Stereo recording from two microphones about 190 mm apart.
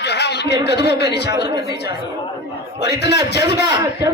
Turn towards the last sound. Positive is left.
turn(degrees=-20)  # may be behind; listen again after turning